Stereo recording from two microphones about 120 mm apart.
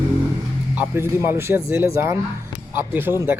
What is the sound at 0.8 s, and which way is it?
Speech, 20° right (ahead or behind).